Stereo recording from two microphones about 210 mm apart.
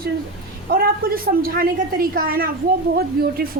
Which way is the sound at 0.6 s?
45° right (ahead or behind).